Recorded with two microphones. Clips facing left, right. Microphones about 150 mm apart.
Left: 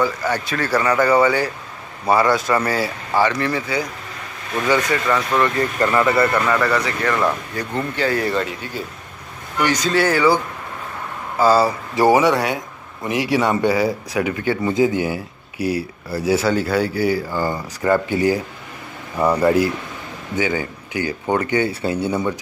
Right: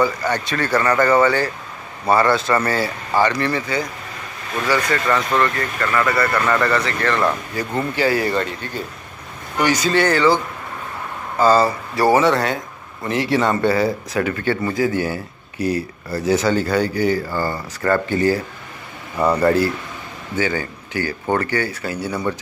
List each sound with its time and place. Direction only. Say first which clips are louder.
0.0 s speech: right 1 dB; 5° left (ahead or behind)
4.6 s speech: left 1 dB; 20° left (ahead or behind)
5.0 s speech: even; 5° left (ahead or behind)
5.6 s speech: left 3 dB; 25° left (ahead or behind); by 7.3 s 10° left (ahead or behind)
7.5 s speech: right 2 dB; 5° right (ahead or behind)
9.6 s speech: right 1 dB; 5° right (ahead or behind); by 22.2 s 25° left (ahead or behind)